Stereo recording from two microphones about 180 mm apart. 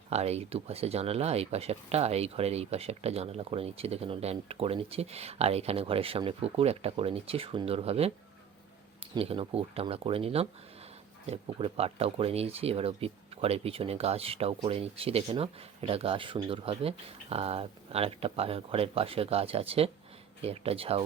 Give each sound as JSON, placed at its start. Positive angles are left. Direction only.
{"t": 0.1, "sound": "speech", "side_deg": -35}
{"t": 9.1, "sound": "speech", "side_deg": -30}